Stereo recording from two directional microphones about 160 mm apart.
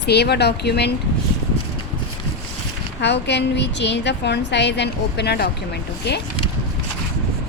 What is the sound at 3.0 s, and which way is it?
A woman's voice, 90° left.